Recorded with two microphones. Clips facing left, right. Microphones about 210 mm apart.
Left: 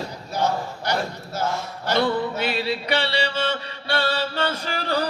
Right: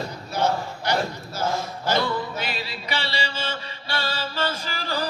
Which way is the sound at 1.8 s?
60° left (ahead or behind).